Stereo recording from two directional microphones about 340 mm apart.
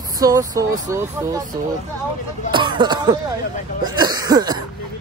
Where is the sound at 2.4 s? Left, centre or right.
Centre.